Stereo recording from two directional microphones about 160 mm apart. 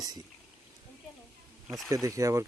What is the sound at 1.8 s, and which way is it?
Speech, 20° right (ahead or behind).